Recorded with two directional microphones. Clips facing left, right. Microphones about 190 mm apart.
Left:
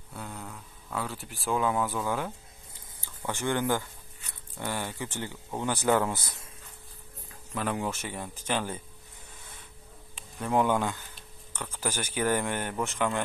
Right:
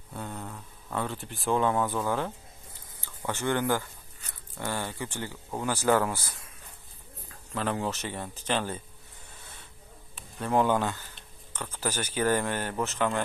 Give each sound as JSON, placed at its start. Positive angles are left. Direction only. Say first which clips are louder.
{"t": 0.1, "sound": "a sound", "louder": "right 3 dB", "side_deg": 0}
{"t": 1.2, "sound": "speech", "louder": "right 2 dB", "side_deg": 5}
{"t": 7.5, "sound": "speech", "louder": "right 1 dB", "side_deg": 15}
{"t": 10.4, "sound": "speech", "louder": "right 1 dB", "side_deg": 15}